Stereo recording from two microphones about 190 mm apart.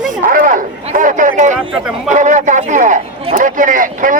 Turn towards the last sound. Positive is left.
turn(degrees=-45)  # may be behind; listen again after turning